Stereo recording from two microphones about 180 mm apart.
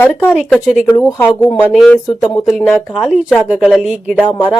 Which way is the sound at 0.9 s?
15° left (ahead or behind).